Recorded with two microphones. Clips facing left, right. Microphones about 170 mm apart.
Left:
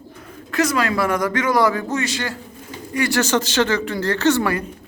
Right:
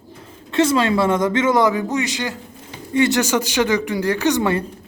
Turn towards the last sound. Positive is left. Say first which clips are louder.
# even
turn(degrees=-20)  # may be behind; listen again after turning